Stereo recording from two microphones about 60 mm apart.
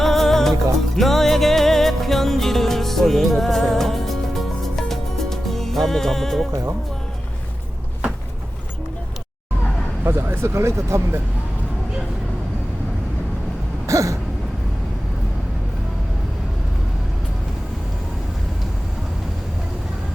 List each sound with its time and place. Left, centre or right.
0.0 s music: centre
10.0 s speech: right
13.8 s throat clearing: right